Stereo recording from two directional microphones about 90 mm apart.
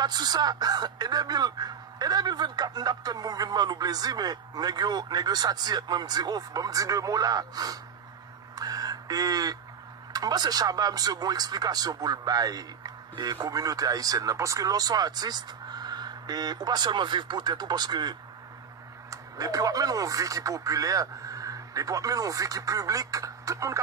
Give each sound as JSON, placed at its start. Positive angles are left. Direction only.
{"t": 0.0, "sound": "speech", "side_deg": -50}
{"t": 8.5, "sound": "a sound", "side_deg": -45}
{"t": 10.1, "sound": "speech", "side_deg": -50}
{"t": 19.0, "sound": "speech", "side_deg": -40}